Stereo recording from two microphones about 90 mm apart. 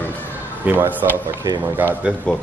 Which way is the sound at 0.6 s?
20° right (ahead or behind).